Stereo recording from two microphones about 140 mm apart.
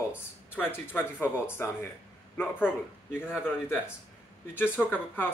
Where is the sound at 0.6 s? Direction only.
15° left (ahead or behind).